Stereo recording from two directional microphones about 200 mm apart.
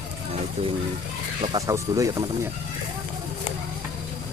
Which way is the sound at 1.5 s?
15° right (ahead or behind).